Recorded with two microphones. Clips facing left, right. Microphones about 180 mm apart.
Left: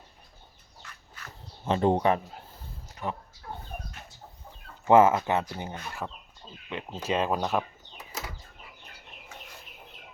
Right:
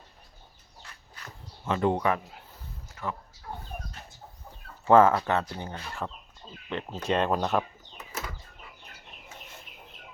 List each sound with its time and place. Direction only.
1.6 s speech: 30° left (ahead or behind)
2.9 s a sound: 20° left (ahead or behind)
4.9 s speech: 15° left (ahead or behind)
6.7 s speech: centre (ahead or behind)